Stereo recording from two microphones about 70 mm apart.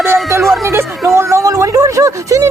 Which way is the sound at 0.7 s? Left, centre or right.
Right.